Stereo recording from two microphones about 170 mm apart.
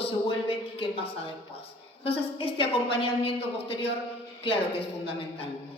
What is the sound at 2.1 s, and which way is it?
Speech, 35° left (ahead or behind).